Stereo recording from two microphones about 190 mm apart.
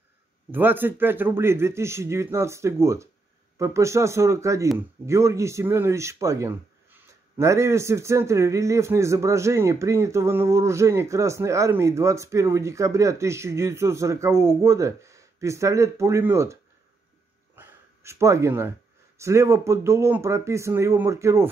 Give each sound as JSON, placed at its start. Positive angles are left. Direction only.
{"t": 0.5, "sound": "speech", "side_deg": -10}
{"t": 17.6, "sound": "a sound", "side_deg": -15}
{"t": 19.1, "sound": "speech", "side_deg": -15}